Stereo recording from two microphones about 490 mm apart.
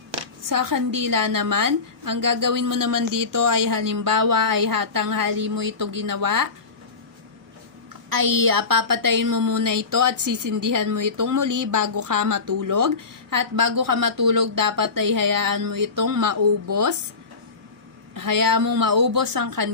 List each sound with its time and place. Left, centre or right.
0.4 s a woman's voice: right
8.1 s a woman's voice: right
18.1 s a woman's voice: right